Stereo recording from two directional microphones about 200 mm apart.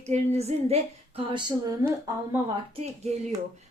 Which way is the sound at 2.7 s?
35° right (ahead or behind).